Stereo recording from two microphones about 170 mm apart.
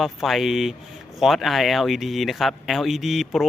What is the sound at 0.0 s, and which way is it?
Speech, centre (ahead or behind).